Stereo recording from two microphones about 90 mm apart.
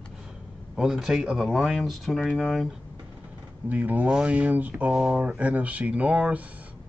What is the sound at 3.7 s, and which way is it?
Speech, 20° right (ahead or behind).